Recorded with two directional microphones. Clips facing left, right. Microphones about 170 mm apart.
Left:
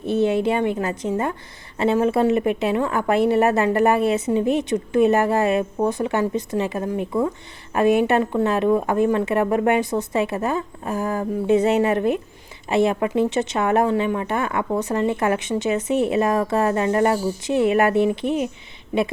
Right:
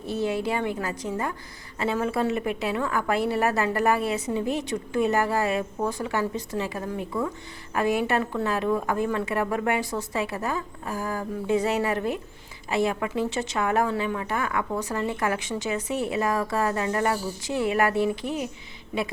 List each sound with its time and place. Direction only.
0.0 s speech: 20° left (ahead or behind)